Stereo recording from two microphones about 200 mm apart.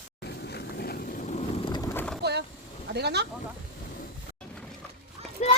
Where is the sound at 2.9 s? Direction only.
55° right (ahead or behind).